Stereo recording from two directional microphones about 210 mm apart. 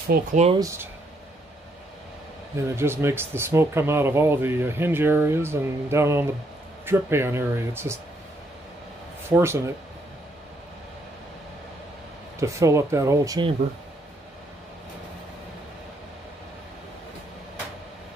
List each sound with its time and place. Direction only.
0.1 s speech: 40° right (ahead or behind)
0.6 s speech: 15° right (ahead or behind)
2.7 s speech: 10° right (ahead or behind)
9.3 s speech: 10° right (ahead or behind)
12.4 s speech: 15° right (ahead or behind)